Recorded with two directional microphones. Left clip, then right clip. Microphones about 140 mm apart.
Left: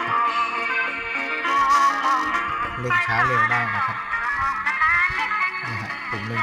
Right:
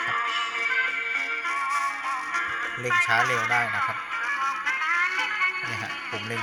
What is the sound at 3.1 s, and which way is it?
Speech, centre (ahead or behind).